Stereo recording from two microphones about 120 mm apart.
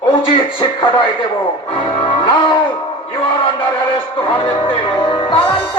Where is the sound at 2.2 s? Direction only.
40° left (ahead or behind).